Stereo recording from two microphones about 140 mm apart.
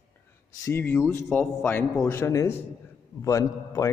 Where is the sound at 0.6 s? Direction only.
15° left (ahead or behind).